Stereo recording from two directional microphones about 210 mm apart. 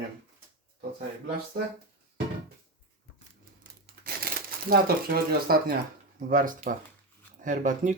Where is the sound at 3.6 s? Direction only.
45° right (ahead or behind).